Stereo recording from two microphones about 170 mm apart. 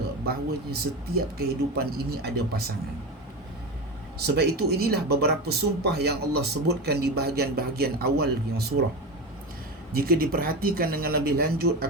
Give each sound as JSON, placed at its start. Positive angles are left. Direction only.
{"t": 0.3, "sound": "speech", "side_deg": -65}
{"t": 4.4, "sound": "speech", "side_deg": -70}
{"t": 9.9, "sound": "speech", "side_deg": -60}